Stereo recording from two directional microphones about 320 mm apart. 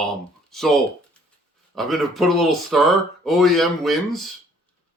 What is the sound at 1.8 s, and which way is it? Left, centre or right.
Speech, centre.